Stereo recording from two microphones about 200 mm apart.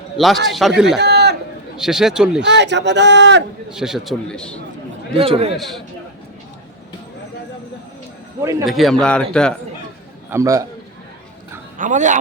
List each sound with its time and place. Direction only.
0.2 s a man's voice: centre (ahead or behind)
0.9 s a sound: 55° right (ahead or behind)
1.7 s a man's voice: 5° right (ahead or behind)
2.4 s speech: 60° right (ahead or behind)
3.7 s a man's voice: 5° right (ahead or behind)
5.1 s a man's voice: 30° right (ahead or behind)
5.5 s a man's voice: centre (ahead or behind)
8.6 s a man's voice: centre (ahead or behind)
10.2 s a man's voice: 15° right (ahead or behind)
11.8 s a man's voice: 40° right (ahead or behind)